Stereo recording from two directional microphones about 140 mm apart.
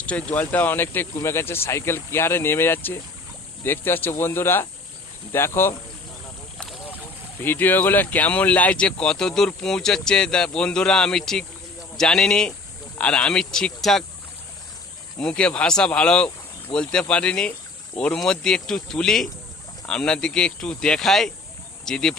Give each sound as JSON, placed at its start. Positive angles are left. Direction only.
{"t": 0.0, "sound": "speech", "side_deg": 10}
{"t": 7.4, "sound": "speech", "side_deg": 15}
{"t": 15.2, "sound": "speech", "side_deg": 5}